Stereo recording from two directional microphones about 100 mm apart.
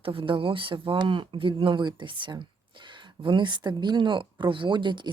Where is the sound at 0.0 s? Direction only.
65° right (ahead or behind).